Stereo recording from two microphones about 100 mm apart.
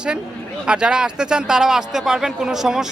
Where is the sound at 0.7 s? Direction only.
10° right (ahead or behind).